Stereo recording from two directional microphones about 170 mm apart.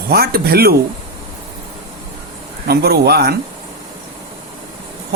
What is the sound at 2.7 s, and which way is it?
Speech, 70° right (ahead or behind).